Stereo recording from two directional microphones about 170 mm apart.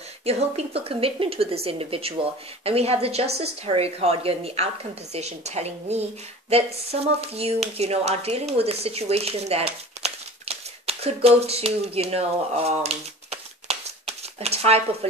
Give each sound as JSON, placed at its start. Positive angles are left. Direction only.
{"t": 0.2, "sound": "a woman's voice", "side_deg": -40}